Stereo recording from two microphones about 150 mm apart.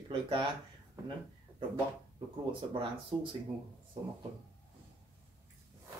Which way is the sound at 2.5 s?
35° right (ahead or behind).